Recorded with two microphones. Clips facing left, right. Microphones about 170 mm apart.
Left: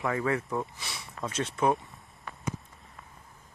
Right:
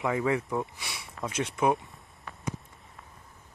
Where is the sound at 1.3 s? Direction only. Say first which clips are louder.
Right 1 dB; 10° right (ahead or behind).